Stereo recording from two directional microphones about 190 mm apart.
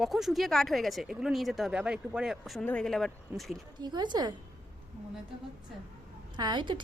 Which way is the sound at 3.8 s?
20° right (ahead or behind).